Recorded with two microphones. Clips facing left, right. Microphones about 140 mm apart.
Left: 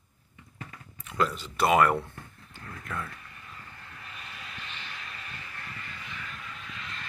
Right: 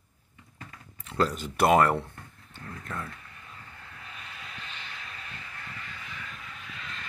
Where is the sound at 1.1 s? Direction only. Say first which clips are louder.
Right 1 dB; 35° right (ahead or behind).